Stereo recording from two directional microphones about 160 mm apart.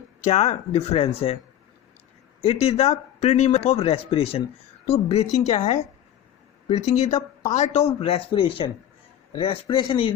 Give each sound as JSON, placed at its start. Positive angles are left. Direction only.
{"t": 0.3, "sound": "speech", "side_deg": 40}
{"t": 2.4, "sound": "a woman's voice", "side_deg": 40}